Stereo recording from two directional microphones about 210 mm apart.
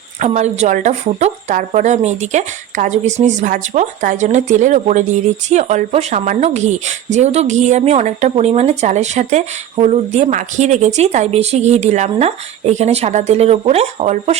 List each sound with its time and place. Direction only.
0.2 s speech: 35° right (ahead or behind)